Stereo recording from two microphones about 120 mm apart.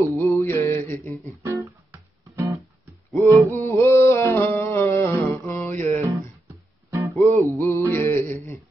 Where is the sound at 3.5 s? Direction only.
20° left (ahead or behind).